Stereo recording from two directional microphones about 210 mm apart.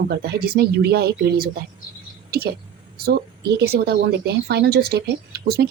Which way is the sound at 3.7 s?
60° right (ahead or behind).